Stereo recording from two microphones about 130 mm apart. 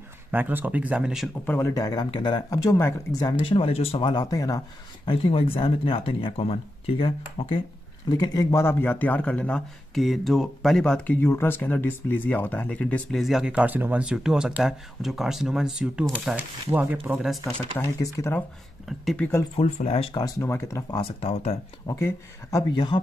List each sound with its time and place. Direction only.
0.3 s speech: 15° right (ahead or behind)
1.4 s a man's voice: 15° left (ahead or behind)
1.7 s speech: 30° left (ahead or behind)
3.4 s speech: 45° left (ahead or behind)
4.1 s speech: 30° left (ahead or behind)
5.1 s speech: 45° left (ahead or behind)
8.1 s a man's voice: 25° left (ahead or behind); by 11.1 s 5° left (ahead or behind)
11.1 s speech: 15° left (ahead or behind); by 17.3 s 10° right (ahead or behind)
17.9 s a man's voice: 25° left (ahead or behind)
19.5 s speech: 50° left (ahead or behind)
20.2 s speech: 25° left (ahead or behind)
20.9 s speech: 45° left (ahead or behind)
21.8 s speech: 25° left (ahead or behind)
22.7 s speech: 35° left (ahead or behind)